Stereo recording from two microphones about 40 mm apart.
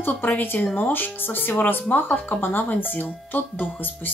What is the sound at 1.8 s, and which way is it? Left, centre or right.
Speech, left.